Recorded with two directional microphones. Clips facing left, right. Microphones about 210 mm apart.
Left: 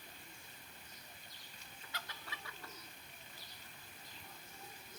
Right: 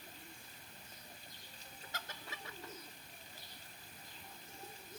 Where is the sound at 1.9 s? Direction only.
45° right (ahead or behind).